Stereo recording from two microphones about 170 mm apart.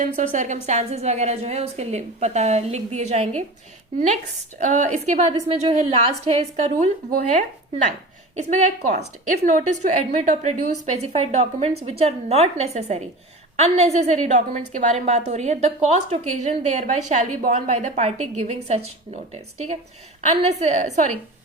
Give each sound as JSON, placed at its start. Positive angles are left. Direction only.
{"t": 0.0, "sound": "a woman's voice", "side_deg": -45}
{"t": 4.6, "sound": "a woman's voice", "side_deg": -45}